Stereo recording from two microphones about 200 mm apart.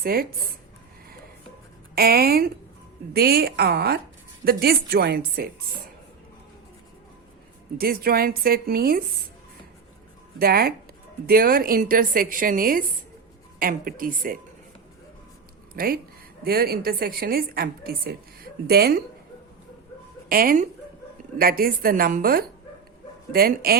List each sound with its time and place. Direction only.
0.0 s a woman's voice: 50° right (ahead or behind)
2.0 s a woman's voice: 50° right (ahead or behind)
7.8 s a woman's voice: 50° right (ahead or behind)
10.3 s a woman's voice: 50° right (ahead or behind)
15.7 s a woman's voice: 45° right (ahead or behind)
20.3 s a woman's voice: 45° right (ahead or behind)